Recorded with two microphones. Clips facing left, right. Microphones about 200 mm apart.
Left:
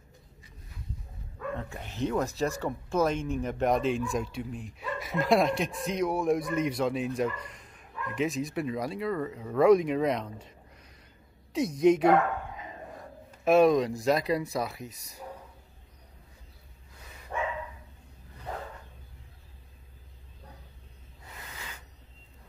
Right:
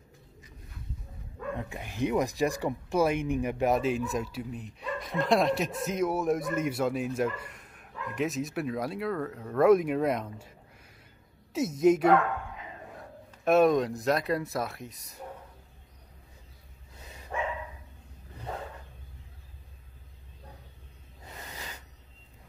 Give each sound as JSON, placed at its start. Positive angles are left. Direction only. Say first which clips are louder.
{"t": 1.5, "sound": "speech", "louder": "right 2 dB", "side_deg": -15}
{"t": 13.4, "sound": "speech", "louder": "left 1 dB", "side_deg": 0}